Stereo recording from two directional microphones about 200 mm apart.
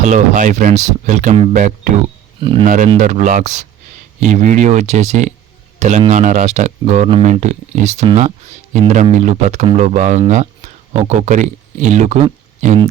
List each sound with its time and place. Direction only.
0.0 s speech: 40° right (ahead or behind)
2.4 s speech: 25° right (ahead or behind)
2.6 s speech: 40° right (ahead or behind)